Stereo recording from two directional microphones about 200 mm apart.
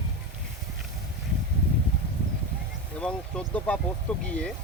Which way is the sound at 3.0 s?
5° left (ahead or behind).